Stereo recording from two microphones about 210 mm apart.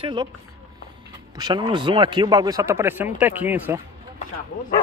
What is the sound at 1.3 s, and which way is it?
Speech, 20° right (ahead or behind).